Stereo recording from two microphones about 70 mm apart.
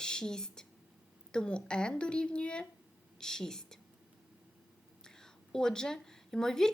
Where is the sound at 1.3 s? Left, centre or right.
Centre.